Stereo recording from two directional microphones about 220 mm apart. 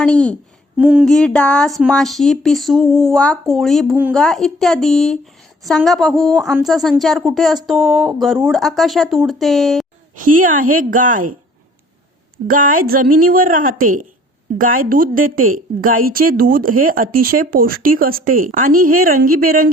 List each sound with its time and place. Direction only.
0.0 s speech: 5° left (ahead or behind)
0.8 s speech: 5° right (ahead or behind)
10.2 s a woman's voice: 40° right (ahead or behind)
12.5 s a woman's voice: 40° right (ahead or behind)